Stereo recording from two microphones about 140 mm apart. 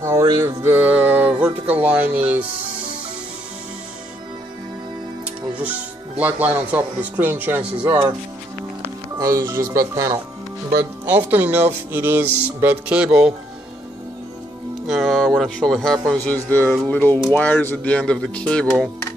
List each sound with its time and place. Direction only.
0.0 s speech: 25° right (ahead or behind)
0.7 s speech: 15° right (ahead or behind)
5.6 s speech: 10° right (ahead or behind)
9.2 s speech: 25° right (ahead or behind); by 13.3 s 5° right (ahead or behind)
14.9 s a man's voice: centre (ahead or behind)